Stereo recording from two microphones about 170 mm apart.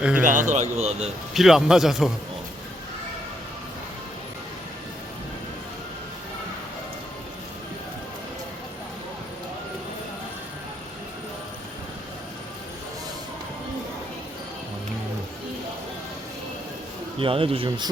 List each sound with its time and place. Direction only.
0.2 s speech: 50° right (ahead or behind)
1.3 s a man's voice: centre (ahead or behind)
17.2 s speech: 30° right (ahead or behind)